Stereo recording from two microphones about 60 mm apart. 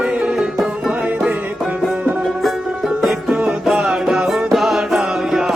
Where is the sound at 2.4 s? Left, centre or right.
Centre.